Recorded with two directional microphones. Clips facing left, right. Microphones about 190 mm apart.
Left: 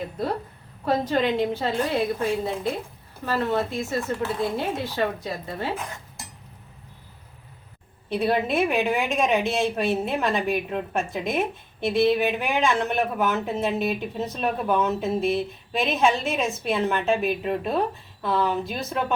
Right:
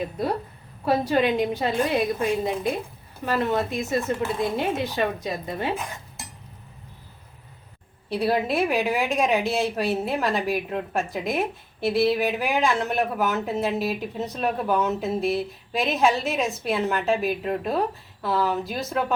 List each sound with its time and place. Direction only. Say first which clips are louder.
0.2 s speech: left 1 dB; 10° right (ahead or behind)
8.1 s a woman's voice: even; centre (ahead or behind)